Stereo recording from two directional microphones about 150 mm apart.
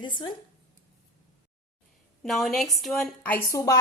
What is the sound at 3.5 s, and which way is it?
Speech, 20° left (ahead or behind).